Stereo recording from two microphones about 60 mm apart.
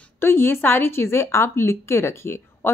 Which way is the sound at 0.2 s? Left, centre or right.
Left.